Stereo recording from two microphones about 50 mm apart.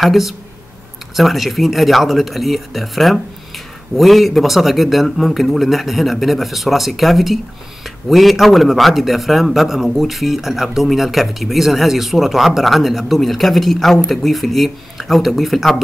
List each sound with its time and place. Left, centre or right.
0.0 s a man's voice: centre